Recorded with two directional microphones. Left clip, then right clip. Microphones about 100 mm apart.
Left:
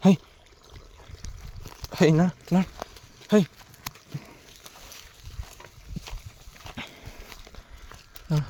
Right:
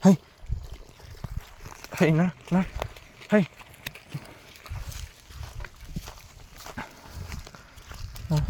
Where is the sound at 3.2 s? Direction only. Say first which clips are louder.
Left 1 dB; 60° left (ahead or behind).